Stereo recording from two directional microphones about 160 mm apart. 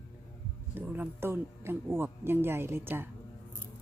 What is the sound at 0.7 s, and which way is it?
Speech, 10° right (ahead or behind).